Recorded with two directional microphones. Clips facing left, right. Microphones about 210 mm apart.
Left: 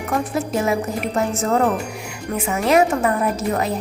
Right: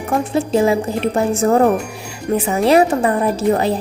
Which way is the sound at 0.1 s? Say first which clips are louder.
Right 5 dB; 30° right (ahead or behind).